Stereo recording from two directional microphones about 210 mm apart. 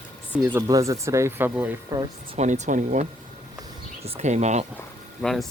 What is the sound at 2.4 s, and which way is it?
Speech, 35° right (ahead or behind).